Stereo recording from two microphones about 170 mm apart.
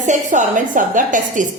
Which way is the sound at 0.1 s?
50° right (ahead or behind).